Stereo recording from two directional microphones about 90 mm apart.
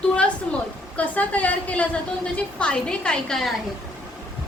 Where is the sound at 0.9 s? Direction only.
15° left (ahead or behind).